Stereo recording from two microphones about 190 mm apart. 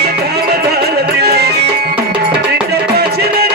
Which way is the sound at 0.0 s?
55° right (ahead or behind).